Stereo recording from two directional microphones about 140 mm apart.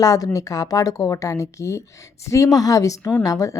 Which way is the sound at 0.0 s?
25° left (ahead or behind).